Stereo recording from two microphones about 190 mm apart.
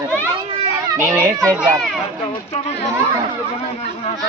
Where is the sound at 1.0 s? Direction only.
15° right (ahead or behind).